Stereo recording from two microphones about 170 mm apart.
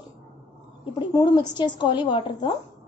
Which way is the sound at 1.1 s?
25° left (ahead or behind).